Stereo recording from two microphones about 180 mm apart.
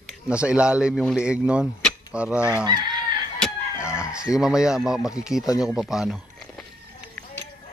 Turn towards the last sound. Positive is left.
turn(degrees=-5)  # may be behind; listen again after turning